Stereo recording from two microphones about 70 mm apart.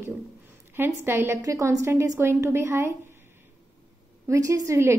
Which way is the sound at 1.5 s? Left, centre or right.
Right.